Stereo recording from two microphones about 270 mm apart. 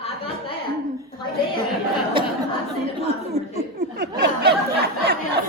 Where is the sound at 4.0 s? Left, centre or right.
Right.